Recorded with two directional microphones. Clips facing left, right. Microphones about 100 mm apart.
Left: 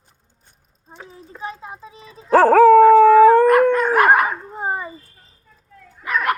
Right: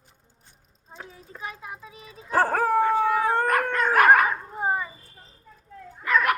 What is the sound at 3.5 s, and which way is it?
Dog, 20° left (ahead or behind).